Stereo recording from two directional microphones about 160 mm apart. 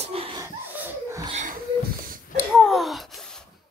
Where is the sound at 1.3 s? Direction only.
50° right (ahead or behind).